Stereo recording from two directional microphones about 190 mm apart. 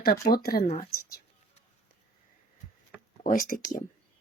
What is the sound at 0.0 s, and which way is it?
Speech, 50° left (ahead or behind).